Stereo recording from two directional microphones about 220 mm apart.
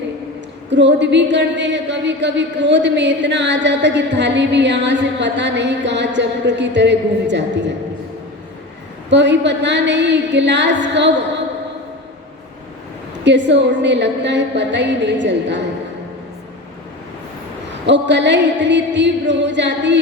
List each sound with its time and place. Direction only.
0.7 s a woman's voice: 55° right (ahead or behind)
9.0 s a woman's voice: 55° right (ahead or behind)
13.2 s a woman's voice: 55° right (ahead or behind)
17.8 s a woman's voice: 55° right (ahead or behind)